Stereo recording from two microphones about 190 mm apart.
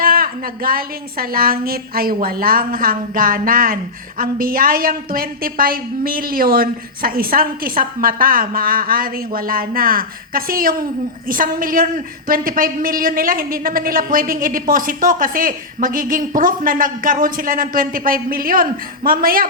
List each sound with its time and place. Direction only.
0.0 s a man's voice: 50° right (ahead or behind)